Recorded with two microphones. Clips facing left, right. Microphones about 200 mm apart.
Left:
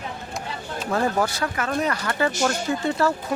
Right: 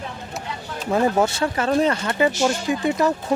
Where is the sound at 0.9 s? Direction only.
20° right (ahead or behind).